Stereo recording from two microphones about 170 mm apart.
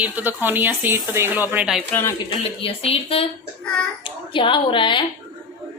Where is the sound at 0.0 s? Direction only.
10° right (ahead or behind).